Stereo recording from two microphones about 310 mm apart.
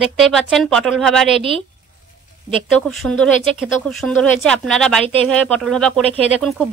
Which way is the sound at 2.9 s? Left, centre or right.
Centre.